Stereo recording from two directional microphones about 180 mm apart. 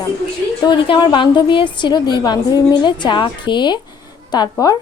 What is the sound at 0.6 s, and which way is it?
A woman's voice, 30° left (ahead or behind).